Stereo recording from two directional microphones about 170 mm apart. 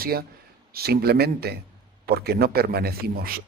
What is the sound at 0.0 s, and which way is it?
Speech, 65° right (ahead or behind).